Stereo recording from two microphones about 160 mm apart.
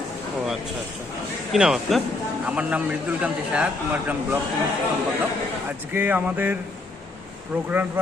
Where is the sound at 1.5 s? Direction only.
Centre (ahead or behind).